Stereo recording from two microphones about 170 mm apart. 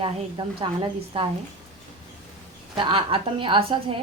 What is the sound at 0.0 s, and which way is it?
A woman's voice, 30° right (ahead or behind).